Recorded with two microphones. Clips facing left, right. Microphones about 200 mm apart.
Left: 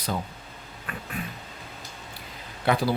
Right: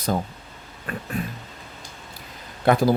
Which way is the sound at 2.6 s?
45° right (ahead or behind).